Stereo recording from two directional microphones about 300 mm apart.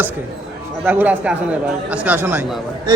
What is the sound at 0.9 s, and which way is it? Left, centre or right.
A man's voice, centre.